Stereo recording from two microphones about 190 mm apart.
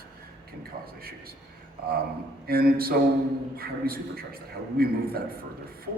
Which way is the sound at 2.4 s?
55° right (ahead or behind).